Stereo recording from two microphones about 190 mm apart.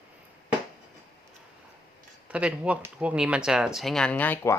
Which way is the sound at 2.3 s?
5° right (ahead or behind).